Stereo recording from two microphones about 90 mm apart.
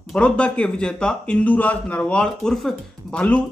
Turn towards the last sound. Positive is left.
turn(degrees=15)  # may be behind; listen again after turning